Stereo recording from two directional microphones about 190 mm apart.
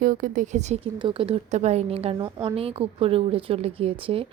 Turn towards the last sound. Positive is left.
turn(degrees=-30)  # may be behind; listen again after turning